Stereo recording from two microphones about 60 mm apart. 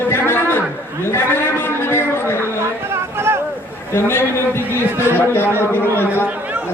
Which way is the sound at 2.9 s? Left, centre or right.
Right.